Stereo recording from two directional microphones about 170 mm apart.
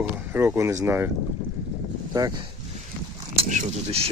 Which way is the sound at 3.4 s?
40° right (ahead or behind).